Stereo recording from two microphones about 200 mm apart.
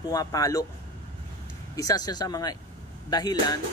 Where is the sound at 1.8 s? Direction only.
20° left (ahead or behind).